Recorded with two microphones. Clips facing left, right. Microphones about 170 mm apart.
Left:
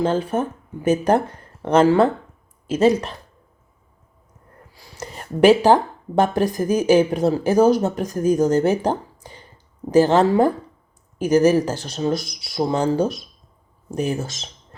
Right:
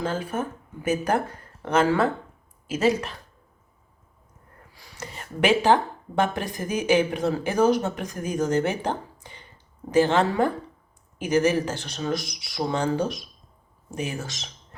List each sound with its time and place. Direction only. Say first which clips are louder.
0.0 s a woman's voice: left 7 dB; 35° left (ahead or behind)
4.9 s a woman's voice: left 8 dB; 35° left (ahead or behind)